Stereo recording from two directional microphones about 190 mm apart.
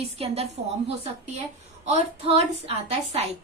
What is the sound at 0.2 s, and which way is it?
A woman's voice, 30° right (ahead or behind).